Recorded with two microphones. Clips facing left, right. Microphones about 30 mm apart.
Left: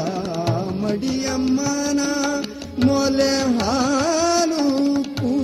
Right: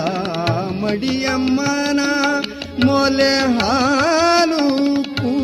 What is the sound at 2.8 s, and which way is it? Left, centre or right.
Music, right.